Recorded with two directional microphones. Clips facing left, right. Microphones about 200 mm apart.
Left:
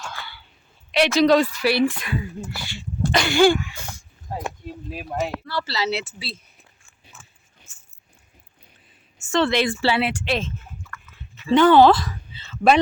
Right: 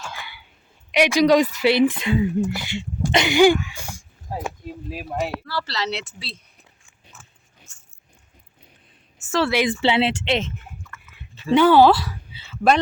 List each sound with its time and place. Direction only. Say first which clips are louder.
0.1 s a sound: even; 15° right (ahead or behind)
0.9 s speech: even; 15° right (ahead or behind); by 6.4 s 5° left (ahead or behind)
7.7 s a sound: right 1 dB; 5° left (ahead or behind)
9.2 s a woman's voice: left 1 dB; 5° right (ahead or behind)
9.8 s speech: right 2 dB; 25° right (ahead or behind)
10.8 s chewing: left 2 dB; 5° left (ahead or behind)
11.5 s speech: even; 10° right (ahead or behind)